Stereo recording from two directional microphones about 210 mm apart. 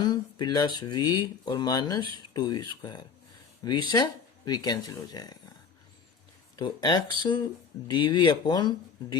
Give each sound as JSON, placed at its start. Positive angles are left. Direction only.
{"t": 0.0, "sound": "speech", "side_deg": 20}
{"t": 6.6, "sound": "speech", "side_deg": 20}